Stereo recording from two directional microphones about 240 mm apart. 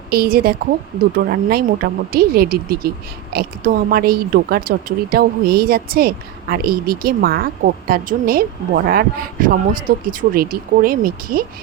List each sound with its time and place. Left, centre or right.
0.1 s speech: right